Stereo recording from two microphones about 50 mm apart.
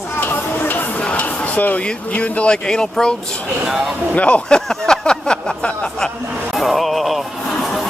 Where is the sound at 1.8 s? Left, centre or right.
Left.